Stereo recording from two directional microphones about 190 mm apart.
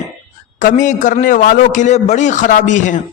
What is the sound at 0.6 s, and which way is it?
A man's voice, 40° left (ahead or behind).